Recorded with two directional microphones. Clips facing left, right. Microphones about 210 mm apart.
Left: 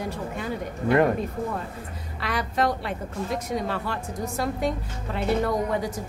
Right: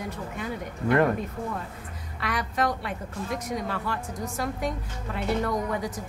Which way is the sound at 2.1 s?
30° left (ahead or behind).